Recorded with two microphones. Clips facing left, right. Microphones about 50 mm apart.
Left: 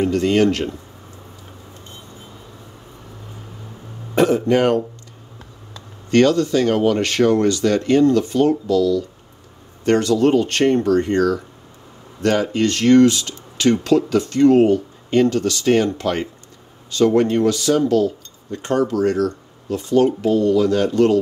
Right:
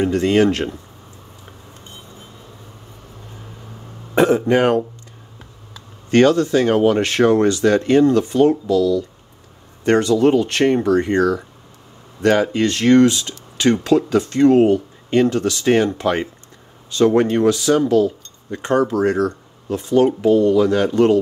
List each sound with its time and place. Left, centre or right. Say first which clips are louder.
0.0 s speech: right 1 dB; right
4.1 s speech: right 1 dB; right
6.0 s speech: right 1 dB; right